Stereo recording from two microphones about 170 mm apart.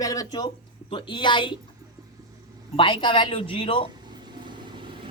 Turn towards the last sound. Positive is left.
turn(degrees=-30)  # may be behind; listen again after turning